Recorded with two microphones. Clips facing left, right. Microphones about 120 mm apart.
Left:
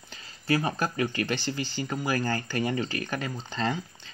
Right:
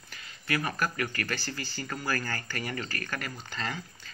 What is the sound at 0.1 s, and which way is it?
Speech, 25° left (ahead or behind).